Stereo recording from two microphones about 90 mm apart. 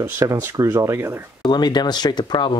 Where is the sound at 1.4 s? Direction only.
55° left (ahead or behind).